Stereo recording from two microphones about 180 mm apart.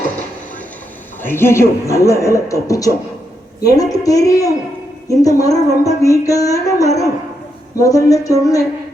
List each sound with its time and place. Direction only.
1.2 s a man's voice: 10° left (ahead or behind)
3.6 s music: 20° left (ahead or behind)